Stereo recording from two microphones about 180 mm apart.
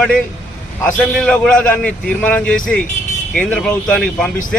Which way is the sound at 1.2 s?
5° left (ahead or behind).